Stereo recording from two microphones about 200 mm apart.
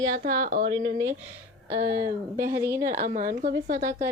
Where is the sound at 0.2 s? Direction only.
45° right (ahead or behind).